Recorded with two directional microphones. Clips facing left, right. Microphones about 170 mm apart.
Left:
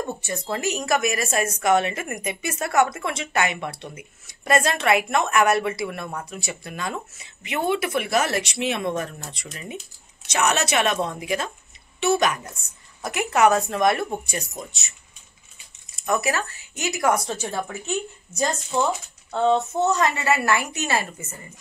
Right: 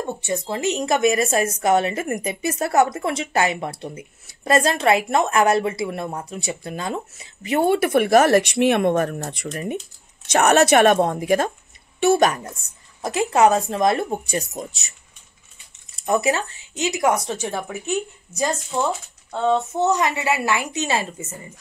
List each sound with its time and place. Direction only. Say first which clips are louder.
0.3 s a woman's voice: right 5 dB; 25° right (ahead or behind); by 12.5 s 40° right (ahead or behind)
13.0 s speech: right 3 dB; 30° right (ahead or behind)
16.0 s speech: right 4 dB; 30° right (ahead or behind)
19.5 s a woman's voice: right 5 dB; 15° right (ahead or behind)